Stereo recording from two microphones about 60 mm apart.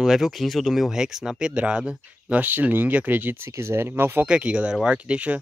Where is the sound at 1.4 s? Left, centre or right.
Centre.